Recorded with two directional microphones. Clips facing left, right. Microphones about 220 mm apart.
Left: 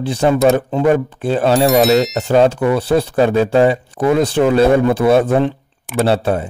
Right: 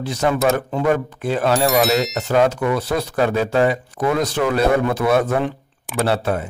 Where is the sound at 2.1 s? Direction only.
30° left (ahead or behind).